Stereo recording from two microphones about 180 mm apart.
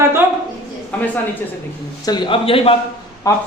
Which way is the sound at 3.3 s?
15° left (ahead or behind).